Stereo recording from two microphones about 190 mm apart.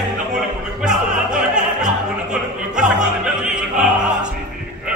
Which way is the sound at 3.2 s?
5° right (ahead or behind).